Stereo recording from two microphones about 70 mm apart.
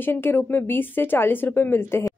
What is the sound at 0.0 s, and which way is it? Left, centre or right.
Speech, left.